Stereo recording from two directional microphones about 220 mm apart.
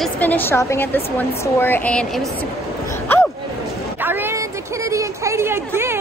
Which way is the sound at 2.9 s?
10° left (ahead or behind).